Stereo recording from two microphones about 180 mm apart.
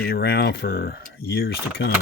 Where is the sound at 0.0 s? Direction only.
60° left (ahead or behind).